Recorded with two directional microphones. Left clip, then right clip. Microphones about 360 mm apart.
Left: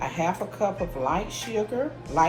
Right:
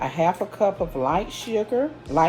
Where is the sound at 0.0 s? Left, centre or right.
Right.